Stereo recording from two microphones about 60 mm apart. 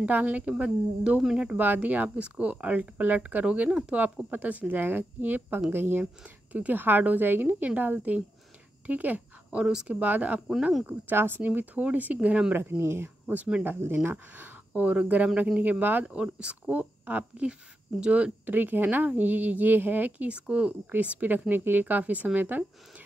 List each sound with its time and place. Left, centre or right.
0.0 s speech: right
1.6 s a woman's voice: right
8.8 s a sound: right
9.6 s speech: centre
9.9 s a woman's voice: right
12.5 s a woman's voice: right
13.3 s speech: right
13.7 s a woman's voice: right
16.2 s speech: centre
16.6 s speech: right
18.4 s a woman's voice: right